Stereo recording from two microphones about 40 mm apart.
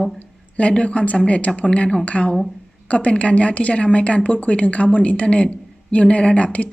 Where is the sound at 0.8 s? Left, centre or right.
Left.